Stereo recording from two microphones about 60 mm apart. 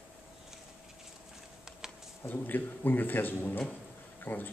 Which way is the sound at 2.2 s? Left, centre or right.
Left.